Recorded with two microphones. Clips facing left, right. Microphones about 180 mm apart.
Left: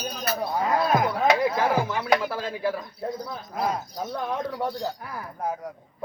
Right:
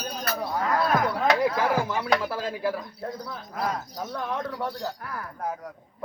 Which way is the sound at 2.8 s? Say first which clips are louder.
Left 3 dB; 10° left (ahead or behind).